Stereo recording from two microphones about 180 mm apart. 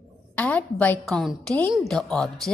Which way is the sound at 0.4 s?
10° left (ahead or behind).